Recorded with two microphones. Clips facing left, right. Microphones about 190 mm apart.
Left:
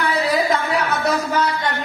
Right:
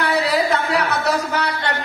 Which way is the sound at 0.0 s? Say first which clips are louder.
Right 1 dB; 70° right (ahead or behind).